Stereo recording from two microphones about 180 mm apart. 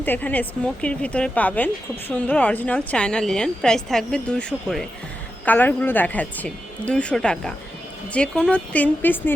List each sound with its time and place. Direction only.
0.0 s speech: 10° left (ahead or behind)